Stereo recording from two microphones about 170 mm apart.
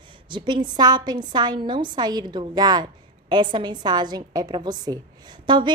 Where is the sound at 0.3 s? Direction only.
30° right (ahead or behind).